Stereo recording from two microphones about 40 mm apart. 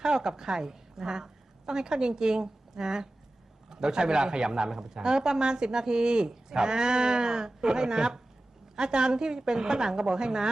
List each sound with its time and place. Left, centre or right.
0.0 s a woman's voice: centre